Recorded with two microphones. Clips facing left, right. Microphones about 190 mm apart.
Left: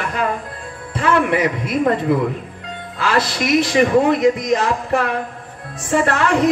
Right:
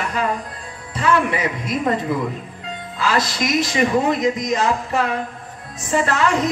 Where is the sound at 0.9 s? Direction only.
60° left (ahead or behind).